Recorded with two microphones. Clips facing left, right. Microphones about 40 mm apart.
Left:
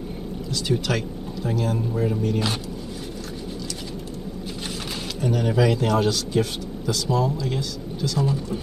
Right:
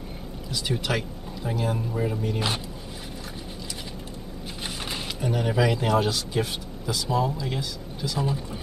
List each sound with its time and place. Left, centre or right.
0.5 s speech: centre
5.2 s speech: centre